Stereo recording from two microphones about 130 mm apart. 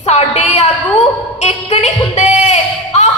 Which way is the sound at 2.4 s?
60° left (ahead or behind).